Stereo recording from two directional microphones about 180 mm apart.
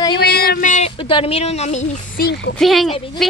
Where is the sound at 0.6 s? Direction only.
40° left (ahead or behind).